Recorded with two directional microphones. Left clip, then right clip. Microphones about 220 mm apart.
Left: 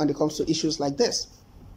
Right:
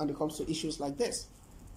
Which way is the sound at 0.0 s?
15° left (ahead or behind).